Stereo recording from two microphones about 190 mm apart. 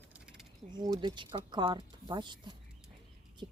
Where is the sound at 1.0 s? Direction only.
25° right (ahead or behind).